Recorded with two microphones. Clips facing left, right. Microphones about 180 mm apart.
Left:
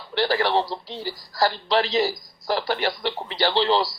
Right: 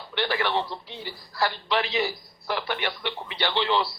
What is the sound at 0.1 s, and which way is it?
A man's voice, 40° left (ahead or behind).